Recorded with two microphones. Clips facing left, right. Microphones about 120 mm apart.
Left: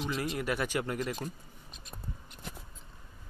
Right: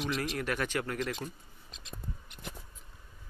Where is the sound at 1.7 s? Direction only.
90° right.